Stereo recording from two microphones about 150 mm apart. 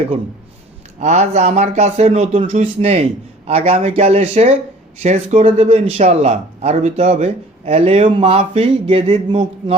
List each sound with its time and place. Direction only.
0.9 s speech: 50° right (ahead or behind)